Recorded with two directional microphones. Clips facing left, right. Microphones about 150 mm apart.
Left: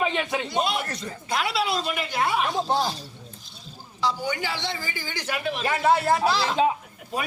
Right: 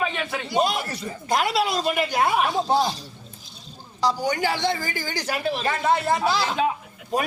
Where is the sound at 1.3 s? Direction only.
45° right (ahead or behind).